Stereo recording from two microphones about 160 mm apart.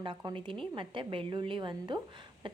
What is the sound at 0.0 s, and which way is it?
A woman's voice, 30° right (ahead or behind).